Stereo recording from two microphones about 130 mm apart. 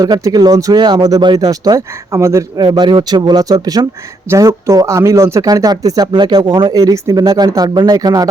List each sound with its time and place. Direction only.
0.0 s speech: 30° right (ahead or behind)
2.6 s speech: 35° right (ahead or behind)